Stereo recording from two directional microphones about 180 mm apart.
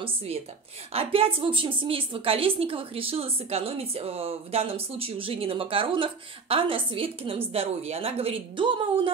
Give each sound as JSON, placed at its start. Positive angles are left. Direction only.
{"t": 0.0, "sound": "a woman's voice", "side_deg": -30}